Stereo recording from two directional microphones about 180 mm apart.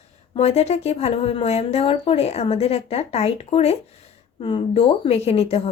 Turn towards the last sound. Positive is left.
turn(degrees=35)  # may be behind; listen again after turning